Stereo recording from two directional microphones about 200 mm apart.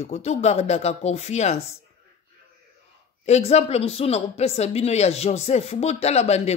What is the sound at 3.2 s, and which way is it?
Speech, 35° left (ahead or behind).